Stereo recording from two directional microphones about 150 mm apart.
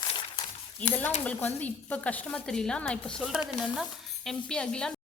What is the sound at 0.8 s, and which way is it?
A woman's voice, 10° left (ahead or behind).